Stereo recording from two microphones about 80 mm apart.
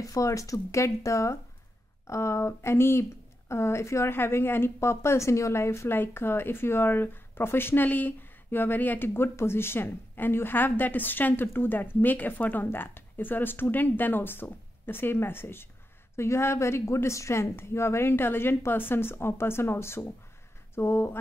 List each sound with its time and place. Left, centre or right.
0.0 s speech: left